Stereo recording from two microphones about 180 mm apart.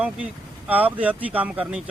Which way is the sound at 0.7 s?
10° right (ahead or behind).